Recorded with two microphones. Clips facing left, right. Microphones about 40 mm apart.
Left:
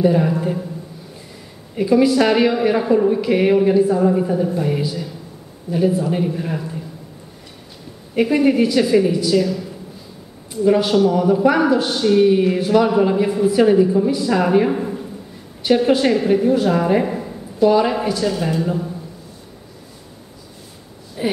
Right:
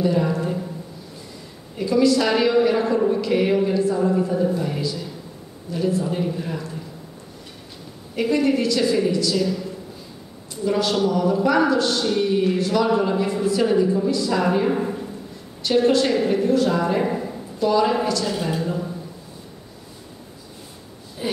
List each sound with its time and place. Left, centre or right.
0.0 s speech: centre
1.8 s a man's voice: left
8.1 s a man's voice: left
14.7 s a man's voice: centre
15.6 s a man's voice: centre
17.0 s a sound: centre
17.6 s a man's voice: left
21.2 s a man's voice: centre